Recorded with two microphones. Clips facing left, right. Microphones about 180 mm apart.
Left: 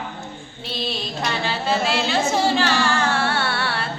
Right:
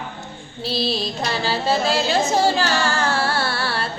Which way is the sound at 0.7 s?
35° right (ahead or behind).